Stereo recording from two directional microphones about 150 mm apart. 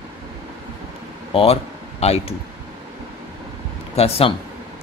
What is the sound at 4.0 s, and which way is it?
Speech, 40° left (ahead or behind).